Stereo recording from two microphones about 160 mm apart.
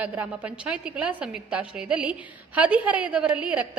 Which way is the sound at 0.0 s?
10° right (ahead or behind).